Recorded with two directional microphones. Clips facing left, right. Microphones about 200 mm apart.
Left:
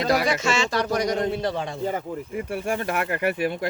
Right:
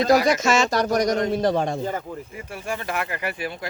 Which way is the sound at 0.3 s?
40° right (ahead or behind).